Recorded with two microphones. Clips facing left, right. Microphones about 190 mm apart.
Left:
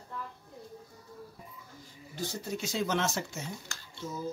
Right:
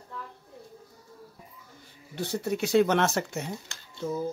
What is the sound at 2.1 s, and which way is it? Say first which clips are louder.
Speech: right 7 dB; 65° right (ahead or behind).